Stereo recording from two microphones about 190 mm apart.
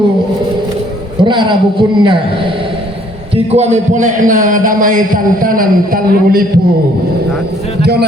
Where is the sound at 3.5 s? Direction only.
35° right (ahead or behind).